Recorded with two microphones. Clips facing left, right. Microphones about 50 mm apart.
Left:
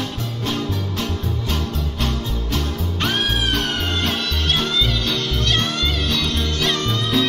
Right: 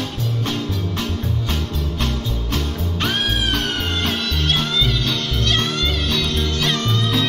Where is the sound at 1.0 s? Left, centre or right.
Right.